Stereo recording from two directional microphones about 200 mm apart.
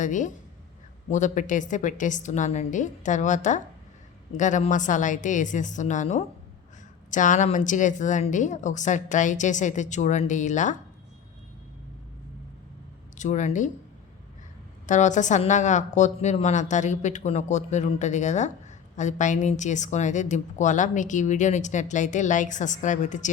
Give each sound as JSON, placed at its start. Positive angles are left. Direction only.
{"t": 0.0, "sound": "a woman's voice", "side_deg": 40}
{"t": 13.1, "sound": "a woman's voice", "side_deg": 35}
{"t": 14.8, "sound": "a woman's voice", "side_deg": 35}